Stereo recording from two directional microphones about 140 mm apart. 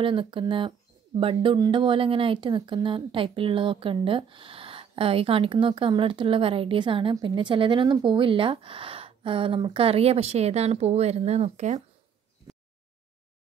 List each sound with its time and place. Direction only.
0.0 s speech: 40° right (ahead or behind); by 11.8 s 55° right (ahead or behind)